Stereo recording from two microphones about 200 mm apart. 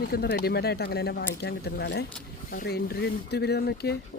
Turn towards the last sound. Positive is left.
turn(degrees=55)  # may be behind; listen again after turning